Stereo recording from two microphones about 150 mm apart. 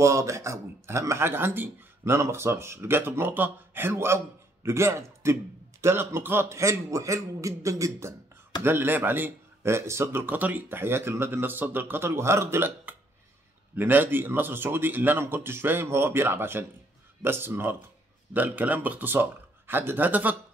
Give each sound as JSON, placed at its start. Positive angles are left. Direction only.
{"t": 0.0, "sound": "a man's voice", "side_deg": -20}